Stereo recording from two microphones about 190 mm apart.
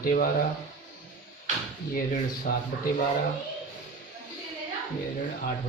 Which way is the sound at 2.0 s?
50° left (ahead or behind).